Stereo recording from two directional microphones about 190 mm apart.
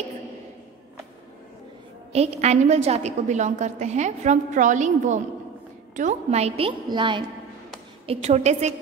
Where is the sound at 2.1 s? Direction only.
35° right (ahead or behind).